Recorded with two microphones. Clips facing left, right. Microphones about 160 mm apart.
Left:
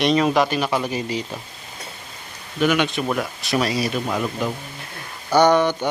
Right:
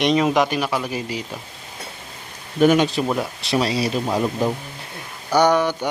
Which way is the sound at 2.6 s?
40° right (ahead or behind).